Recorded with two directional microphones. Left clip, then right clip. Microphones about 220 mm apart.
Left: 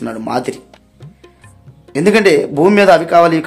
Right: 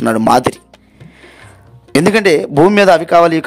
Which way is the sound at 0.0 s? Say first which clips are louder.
Right 8 dB; 40° right (ahead or behind).